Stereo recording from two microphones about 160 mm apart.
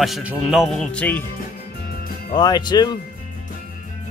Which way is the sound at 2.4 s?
25° left (ahead or behind).